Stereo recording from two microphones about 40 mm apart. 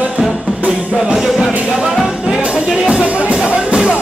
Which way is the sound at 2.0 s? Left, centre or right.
Centre.